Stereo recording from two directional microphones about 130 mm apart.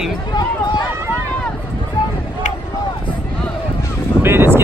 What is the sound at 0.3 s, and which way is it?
Run, 35° left (ahead or behind).